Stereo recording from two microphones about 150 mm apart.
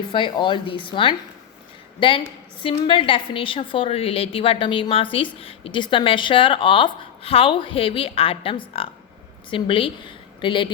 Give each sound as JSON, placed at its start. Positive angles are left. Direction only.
{"t": 0.1, "sound": "a woman's voice", "side_deg": 35}